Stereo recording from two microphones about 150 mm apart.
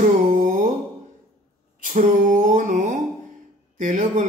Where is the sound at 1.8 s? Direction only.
60° right (ahead or behind).